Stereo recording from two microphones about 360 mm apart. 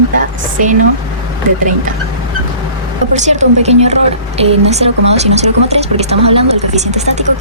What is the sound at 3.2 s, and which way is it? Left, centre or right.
A woman's voice, centre.